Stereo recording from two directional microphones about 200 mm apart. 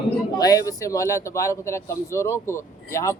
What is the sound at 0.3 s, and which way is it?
Speech, 20° left (ahead or behind).